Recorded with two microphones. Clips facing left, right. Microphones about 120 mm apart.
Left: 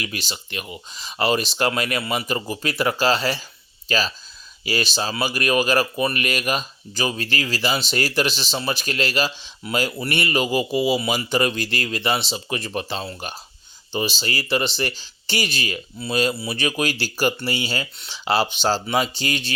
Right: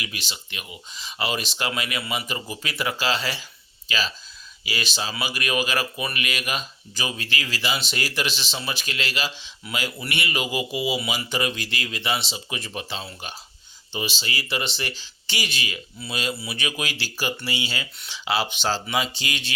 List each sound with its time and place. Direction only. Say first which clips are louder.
0.0 s speech: left 5 dB; 40° left (ahead or behind)